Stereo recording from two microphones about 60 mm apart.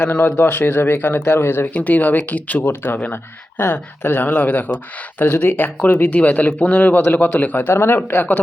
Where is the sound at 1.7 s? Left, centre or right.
Left.